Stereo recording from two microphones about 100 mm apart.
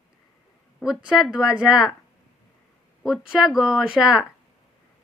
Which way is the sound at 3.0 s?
5° right (ahead or behind).